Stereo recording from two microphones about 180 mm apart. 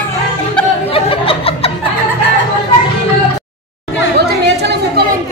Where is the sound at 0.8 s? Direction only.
30° left (ahead or behind).